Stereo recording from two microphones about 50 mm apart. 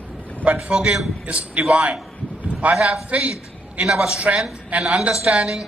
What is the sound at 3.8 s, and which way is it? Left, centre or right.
A man's voice, centre.